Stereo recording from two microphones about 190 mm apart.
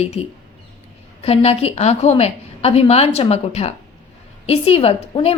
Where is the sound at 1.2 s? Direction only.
30° left (ahead or behind).